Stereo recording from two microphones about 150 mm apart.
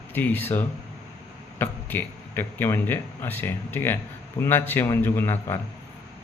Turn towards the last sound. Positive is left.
turn(degrees=15)  # may be behind; listen again after turning